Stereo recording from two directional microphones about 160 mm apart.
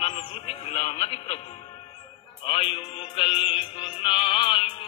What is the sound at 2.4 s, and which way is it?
Music, 35° left (ahead or behind).